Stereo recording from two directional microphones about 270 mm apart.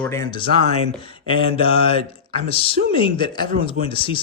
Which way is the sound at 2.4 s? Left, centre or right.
Left.